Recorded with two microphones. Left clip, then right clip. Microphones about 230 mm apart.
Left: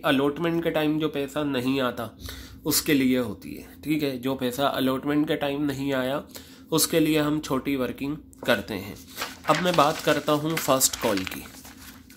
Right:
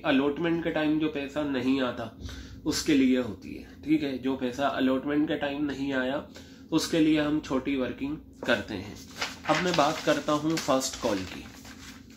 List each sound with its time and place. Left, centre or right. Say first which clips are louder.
0.0 s speech: left 3 dB; left